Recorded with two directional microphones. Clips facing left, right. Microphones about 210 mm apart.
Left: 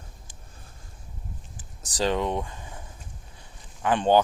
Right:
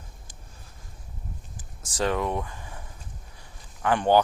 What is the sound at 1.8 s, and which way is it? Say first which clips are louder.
Speech: left 1 dB; 20° left (ahead or behind).